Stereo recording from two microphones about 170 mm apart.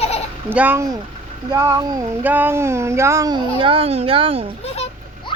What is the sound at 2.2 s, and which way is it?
A child's voice, 10° right (ahead or behind).